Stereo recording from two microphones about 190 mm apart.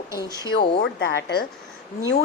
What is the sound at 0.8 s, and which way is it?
Speech, 60° left (ahead or behind).